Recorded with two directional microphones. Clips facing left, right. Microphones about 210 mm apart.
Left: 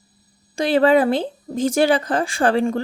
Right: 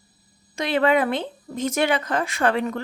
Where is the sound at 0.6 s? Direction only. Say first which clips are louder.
Left 5 dB; 35° left (ahead or behind).